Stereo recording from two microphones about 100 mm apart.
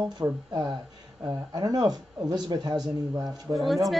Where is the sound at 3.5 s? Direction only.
Centre (ahead or behind).